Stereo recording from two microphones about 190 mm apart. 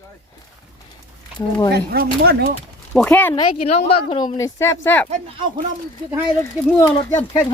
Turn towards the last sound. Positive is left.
turn(degrees=15)  # may be behind; listen again after turning